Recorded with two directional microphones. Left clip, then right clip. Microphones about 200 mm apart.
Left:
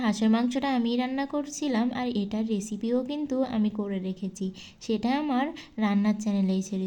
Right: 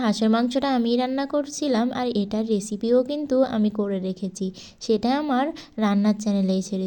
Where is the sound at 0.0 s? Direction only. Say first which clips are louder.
Right 4 dB; 20° right (ahead or behind).